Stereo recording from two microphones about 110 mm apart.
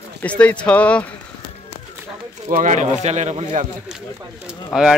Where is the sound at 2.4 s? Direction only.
90° right.